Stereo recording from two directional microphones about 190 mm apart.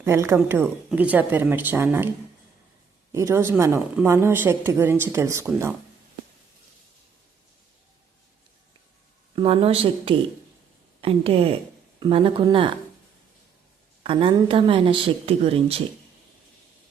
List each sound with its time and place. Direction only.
0.0 s a woman's voice: 15° right (ahead or behind)
3.1 s a woman's voice: 15° right (ahead or behind)
9.3 s a woman's voice: 30° right (ahead or behind)
14.0 s a woman's voice: 30° right (ahead or behind)